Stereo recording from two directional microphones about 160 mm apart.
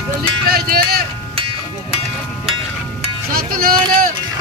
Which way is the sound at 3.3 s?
65° right (ahead or behind).